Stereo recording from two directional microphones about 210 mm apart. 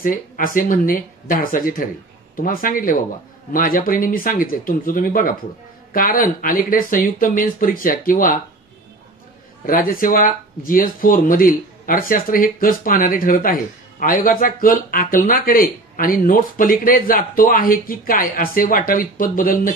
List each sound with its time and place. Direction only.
0.0 s speech: 40° left (ahead or behind)
9.7 s speech: 40° left (ahead or behind)